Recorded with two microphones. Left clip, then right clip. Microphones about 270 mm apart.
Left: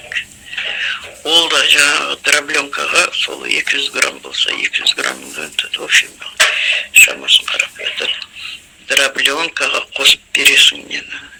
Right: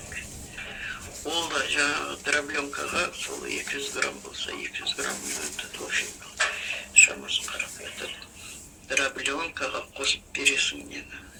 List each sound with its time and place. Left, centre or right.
0.5 s speech: left